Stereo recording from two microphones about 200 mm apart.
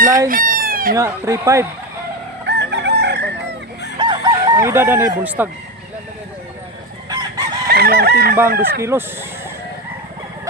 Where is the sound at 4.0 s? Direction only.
25° right (ahead or behind).